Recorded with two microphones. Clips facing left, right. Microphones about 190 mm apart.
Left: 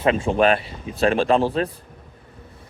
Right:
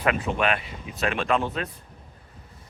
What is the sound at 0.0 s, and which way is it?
Speech, 25° left (ahead or behind).